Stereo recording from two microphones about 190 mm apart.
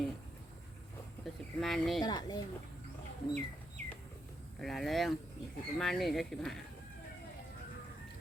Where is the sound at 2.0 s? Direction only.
20° left (ahead or behind).